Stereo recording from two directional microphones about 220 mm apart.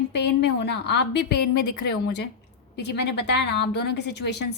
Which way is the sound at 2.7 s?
50° left (ahead or behind).